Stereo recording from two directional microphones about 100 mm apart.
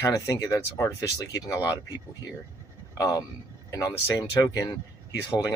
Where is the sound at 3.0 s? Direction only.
35° left (ahead or behind).